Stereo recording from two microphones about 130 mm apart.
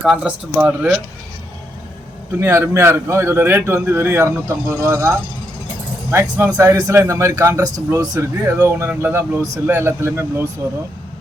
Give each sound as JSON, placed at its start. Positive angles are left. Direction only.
{"t": 0.0, "sound": "speech", "side_deg": -5}
{"t": 2.3, "sound": "a man's voice", "side_deg": -20}